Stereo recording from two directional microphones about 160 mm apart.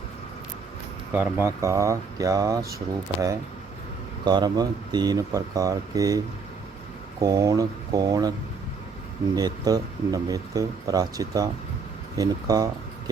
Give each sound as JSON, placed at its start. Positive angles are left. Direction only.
{"t": 1.1, "sound": "speech", "side_deg": -15}
{"t": 4.3, "sound": "speech", "side_deg": -25}
{"t": 9.3, "sound": "speech", "side_deg": -25}